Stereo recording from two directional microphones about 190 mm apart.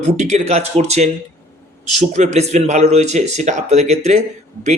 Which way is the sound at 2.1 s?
35° right (ahead or behind).